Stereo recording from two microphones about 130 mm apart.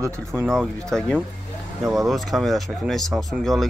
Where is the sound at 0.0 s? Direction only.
20° right (ahead or behind).